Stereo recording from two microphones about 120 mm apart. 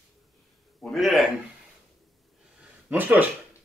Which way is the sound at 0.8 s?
Centre (ahead or behind).